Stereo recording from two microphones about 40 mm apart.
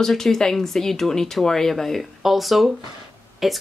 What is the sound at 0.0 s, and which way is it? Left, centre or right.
Speech, centre.